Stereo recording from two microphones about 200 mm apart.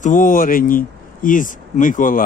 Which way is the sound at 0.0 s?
40° left (ahead or behind).